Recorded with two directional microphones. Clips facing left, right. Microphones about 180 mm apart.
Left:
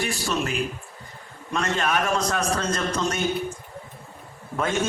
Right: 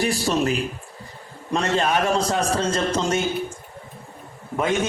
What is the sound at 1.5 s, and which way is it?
A man's voice, 30° right (ahead or behind).